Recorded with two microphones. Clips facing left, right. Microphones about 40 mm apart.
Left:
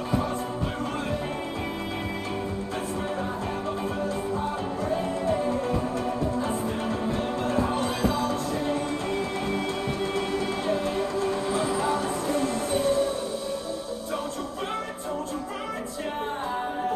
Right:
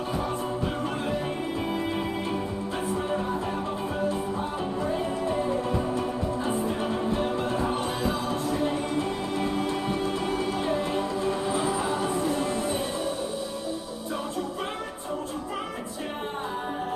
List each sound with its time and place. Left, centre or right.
7.8 s music: right
11.0 s music: right